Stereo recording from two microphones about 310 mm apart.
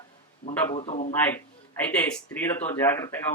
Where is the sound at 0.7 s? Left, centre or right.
Centre.